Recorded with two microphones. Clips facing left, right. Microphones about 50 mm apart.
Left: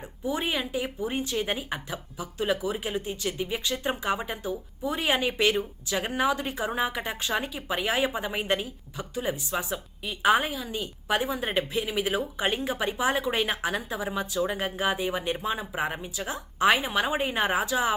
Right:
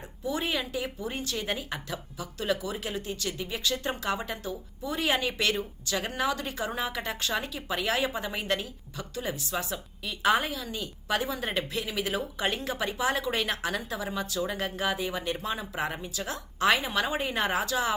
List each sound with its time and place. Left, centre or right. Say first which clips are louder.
0.3 s speech: left 2 dB; centre